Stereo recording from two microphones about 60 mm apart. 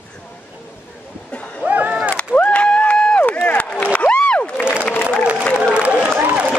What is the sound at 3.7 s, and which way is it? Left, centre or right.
Crowd, centre.